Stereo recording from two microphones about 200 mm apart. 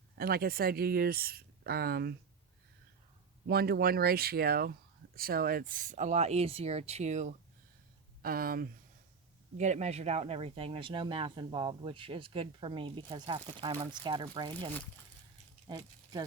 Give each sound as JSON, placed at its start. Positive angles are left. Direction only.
{"t": 0.2, "sound": "speech", "side_deg": -50}
{"t": 3.4, "sound": "speech", "side_deg": -50}
{"t": 8.2, "sound": "speech", "side_deg": -45}
{"t": 9.6, "sound": "speech", "side_deg": -35}